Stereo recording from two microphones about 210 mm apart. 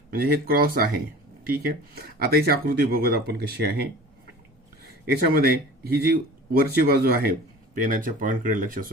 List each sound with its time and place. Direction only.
0.1 s a man's voice: 45° right (ahead or behind)